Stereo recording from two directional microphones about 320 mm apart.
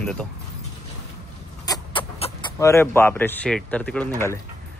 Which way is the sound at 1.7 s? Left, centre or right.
Centre.